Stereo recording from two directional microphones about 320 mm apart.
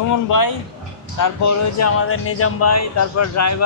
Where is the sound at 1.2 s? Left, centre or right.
Left.